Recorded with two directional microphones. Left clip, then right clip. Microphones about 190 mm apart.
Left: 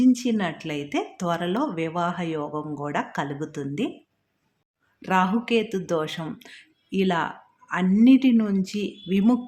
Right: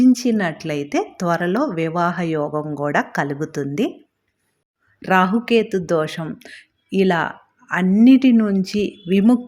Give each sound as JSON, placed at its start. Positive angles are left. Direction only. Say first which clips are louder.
{"t": 0.0, "sound": "speech", "louder": "right 5 dB", "side_deg": -25}
{"t": 4.9, "sound": "speech", "louder": "right 6 dB", "side_deg": -25}